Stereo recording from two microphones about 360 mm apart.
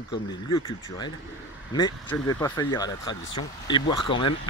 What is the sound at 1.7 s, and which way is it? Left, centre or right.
Speech, centre.